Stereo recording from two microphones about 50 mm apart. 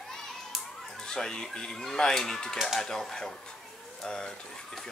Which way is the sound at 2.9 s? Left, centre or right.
Centre.